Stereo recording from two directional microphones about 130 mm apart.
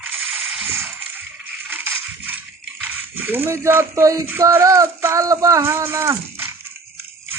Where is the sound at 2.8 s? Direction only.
15° right (ahead or behind).